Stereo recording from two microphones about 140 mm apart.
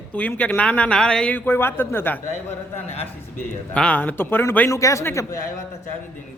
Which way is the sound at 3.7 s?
10° left (ahead or behind).